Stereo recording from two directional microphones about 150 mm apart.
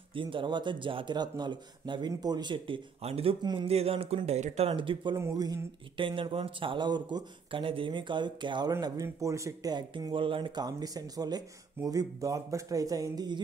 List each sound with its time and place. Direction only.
0.1 s speech: 35° right (ahead or behind)
5.1 s speech: 25° right (ahead or behind)